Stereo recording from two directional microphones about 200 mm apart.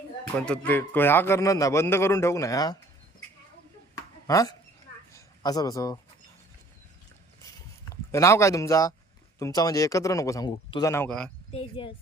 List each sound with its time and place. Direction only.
0.3 s a man's voice: 5° left (ahead or behind)
4.3 s a man's voice: 15° left (ahead or behind)
8.1 s a man's voice: 15° left (ahead or behind)
11.5 s speech: 25° left (ahead or behind)